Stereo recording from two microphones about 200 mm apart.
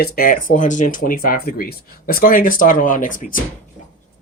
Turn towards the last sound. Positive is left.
turn(degrees=40)  # may be behind; listen again after turning